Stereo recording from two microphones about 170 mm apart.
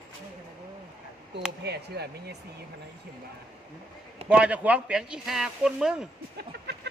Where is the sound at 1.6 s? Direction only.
75° right (ahead or behind).